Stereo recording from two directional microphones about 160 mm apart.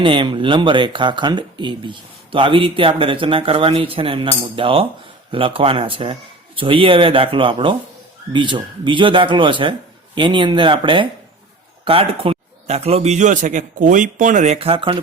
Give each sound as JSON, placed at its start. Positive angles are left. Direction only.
{"t": 0.0, "sound": "a man's voice", "side_deg": -30}